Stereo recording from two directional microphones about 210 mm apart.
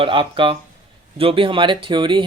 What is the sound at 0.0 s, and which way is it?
Speech, 25° right (ahead or behind).